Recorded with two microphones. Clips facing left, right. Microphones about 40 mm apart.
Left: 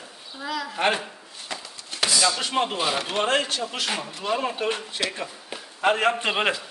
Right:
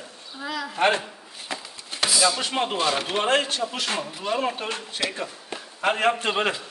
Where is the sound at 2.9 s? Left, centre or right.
Centre.